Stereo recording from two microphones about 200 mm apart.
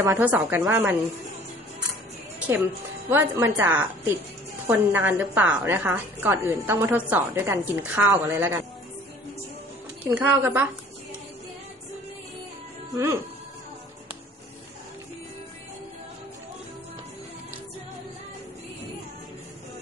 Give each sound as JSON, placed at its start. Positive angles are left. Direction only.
{"t": 0.0, "sound": "a woman's voice", "side_deg": -10}
{"t": 2.4, "sound": "a woman's voice", "side_deg": -10}
{"t": 10.1, "sound": "a woman's voice", "side_deg": -10}
{"t": 12.9, "sound": "a woman's voice", "side_deg": -15}